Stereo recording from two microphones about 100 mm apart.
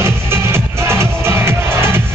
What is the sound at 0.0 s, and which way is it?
Music, 25° right (ahead or behind).